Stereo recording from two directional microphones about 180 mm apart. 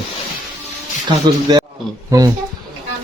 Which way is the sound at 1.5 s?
20° right (ahead or behind).